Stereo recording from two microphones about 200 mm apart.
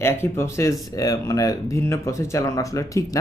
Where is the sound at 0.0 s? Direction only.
10° left (ahead or behind).